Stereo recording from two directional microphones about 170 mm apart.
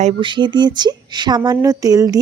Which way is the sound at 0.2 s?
25° right (ahead or behind).